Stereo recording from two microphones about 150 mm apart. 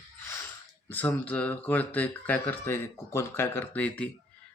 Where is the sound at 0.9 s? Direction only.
10° left (ahead or behind).